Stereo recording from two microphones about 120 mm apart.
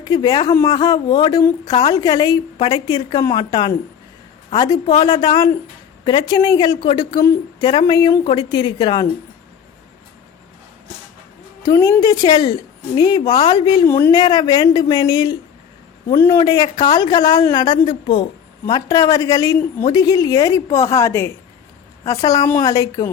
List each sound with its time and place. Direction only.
0.0 s a woman's voice: 30° left (ahead or behind)
11.6 s a woman's voice: 30° left (ahead or behind)
13.8 s a woman's voice: 20° left (ahead or behind)
14.1 s a woman's voice: 35° left (ahead or behind)
16.4 s a woman's voice: 35° left (ahead or behind)